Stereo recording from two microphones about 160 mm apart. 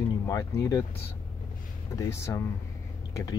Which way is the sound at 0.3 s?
20° left (ahead or behind).